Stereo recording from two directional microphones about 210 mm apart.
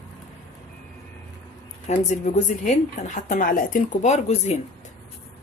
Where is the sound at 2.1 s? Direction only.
35° left (ahead or behind).